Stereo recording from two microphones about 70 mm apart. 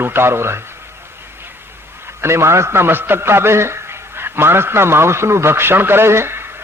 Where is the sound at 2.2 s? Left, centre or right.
Right.